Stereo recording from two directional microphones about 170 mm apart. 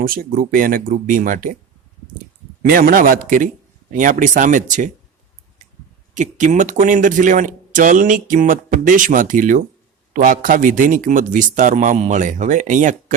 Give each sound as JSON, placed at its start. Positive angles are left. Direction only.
{"t": 0.0, "sound": "speech", "side_deg": -60}
{"t": 2.6, "sound": "speech", "side_deg": -60}
{"t": 6.1, "sound": "speech", "side_deg": -45}